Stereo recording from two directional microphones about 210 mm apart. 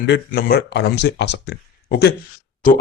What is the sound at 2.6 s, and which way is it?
Speech, 40° left (ahead or behind).